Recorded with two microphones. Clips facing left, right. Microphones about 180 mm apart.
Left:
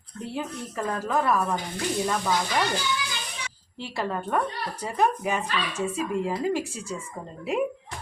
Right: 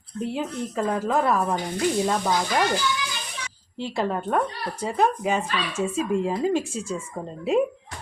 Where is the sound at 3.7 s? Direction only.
20° right (ahead or behind).